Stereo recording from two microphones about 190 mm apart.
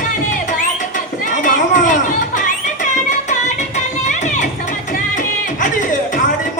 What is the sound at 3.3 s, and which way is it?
Music, 40° left (ahead or behind).